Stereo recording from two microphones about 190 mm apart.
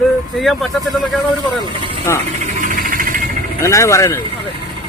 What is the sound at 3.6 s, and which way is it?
Speech, 15° left (ahead or behind).